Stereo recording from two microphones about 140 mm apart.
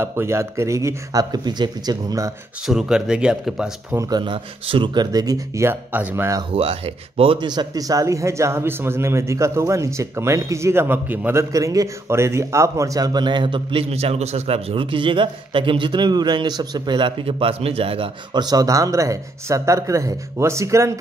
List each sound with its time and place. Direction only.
0.0 s speech: 20° right (ahead or behind)
2.6 s speech: 5° right (ahead or behind)
3.9 s speech: 25° right (ahead or behind)
4.2 s speech: 35° right (ahead or behind); by 6.4 s 15° right (ahead or behind)
6.5 s speech: 45° right (ahead or behind); by 11.4 s 15° right (ahead or behind)
11.5 s speech: 25° right (ahead or behind)